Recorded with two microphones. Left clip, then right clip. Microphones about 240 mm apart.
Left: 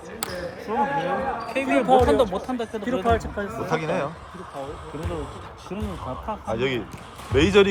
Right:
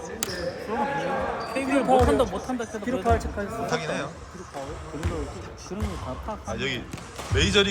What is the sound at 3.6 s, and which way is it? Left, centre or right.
Speech, left.